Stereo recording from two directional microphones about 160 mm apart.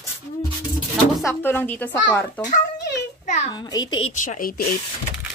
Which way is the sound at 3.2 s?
45° left (ahead or behind).